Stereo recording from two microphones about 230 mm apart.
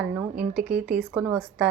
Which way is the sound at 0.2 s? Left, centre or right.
Centre.